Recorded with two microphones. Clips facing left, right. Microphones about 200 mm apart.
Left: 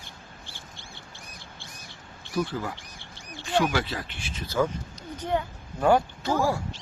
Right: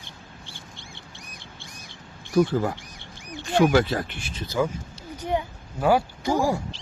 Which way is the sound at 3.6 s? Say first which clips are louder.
Right 8 dB; 50° right (ahead or behind).